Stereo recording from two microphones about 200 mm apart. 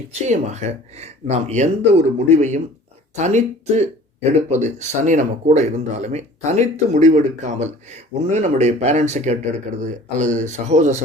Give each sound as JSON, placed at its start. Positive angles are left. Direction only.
{"t": 0.3, "sound": "speech", "side_deg": -35}